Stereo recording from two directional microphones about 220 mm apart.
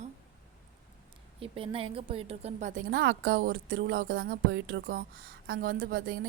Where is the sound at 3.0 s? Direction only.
45° right (ahead or behind).